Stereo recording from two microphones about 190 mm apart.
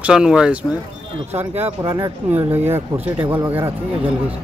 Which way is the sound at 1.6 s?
15° right (ahead or behind).